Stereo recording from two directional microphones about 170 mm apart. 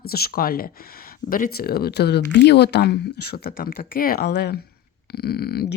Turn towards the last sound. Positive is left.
turn(degrees=70)  # may be behind; listen again after turning